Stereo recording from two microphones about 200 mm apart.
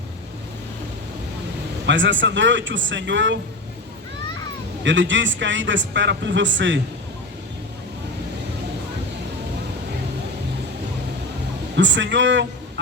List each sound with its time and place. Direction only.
1.9 s a man's voice: 65° right (ahead or behind)
4.8 s a man's voice: 65° right (ahead or behind)
11.8 s a man's voice: 65° right (ahead or behind)